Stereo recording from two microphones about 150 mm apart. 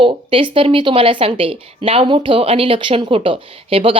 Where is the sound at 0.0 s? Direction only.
35° right (ahead or behind).